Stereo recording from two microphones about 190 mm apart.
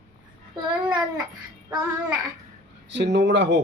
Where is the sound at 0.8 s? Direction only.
25° right (ahead or behind).